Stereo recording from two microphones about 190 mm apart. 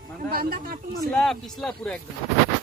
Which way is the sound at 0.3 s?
50° right (ahead or behind).